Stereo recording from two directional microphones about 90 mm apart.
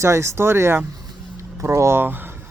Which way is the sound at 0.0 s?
30° right (ahead or behind).